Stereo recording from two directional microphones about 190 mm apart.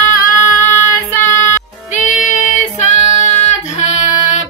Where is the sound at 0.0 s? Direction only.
15° left (ahead or behind).